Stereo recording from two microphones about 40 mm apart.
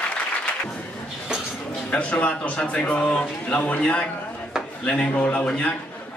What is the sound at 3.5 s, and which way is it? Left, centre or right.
Speech, left.